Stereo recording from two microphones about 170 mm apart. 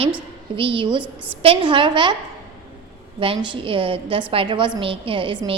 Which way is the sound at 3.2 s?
30° right (ahead or behind).